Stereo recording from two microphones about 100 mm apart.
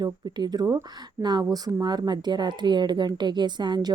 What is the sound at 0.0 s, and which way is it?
Speech, 45° right (ahead or behind).